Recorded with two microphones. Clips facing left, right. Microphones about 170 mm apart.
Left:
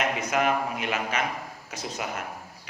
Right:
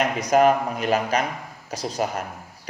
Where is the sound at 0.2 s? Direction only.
40° right (ahead or behind).